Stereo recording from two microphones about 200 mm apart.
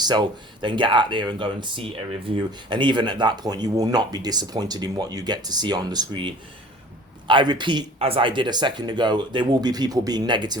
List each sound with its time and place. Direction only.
0.0 s speech: 20° right (ahead or behind)